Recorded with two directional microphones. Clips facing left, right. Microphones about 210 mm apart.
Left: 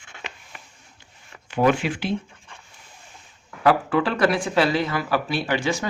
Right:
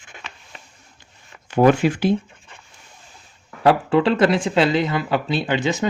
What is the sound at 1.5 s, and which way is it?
Speech, 40° right (ahead or behind).